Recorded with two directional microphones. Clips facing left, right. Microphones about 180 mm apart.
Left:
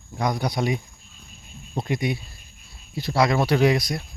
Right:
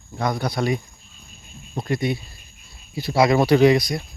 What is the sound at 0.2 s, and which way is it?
Speech, 15° left (ahead or behind).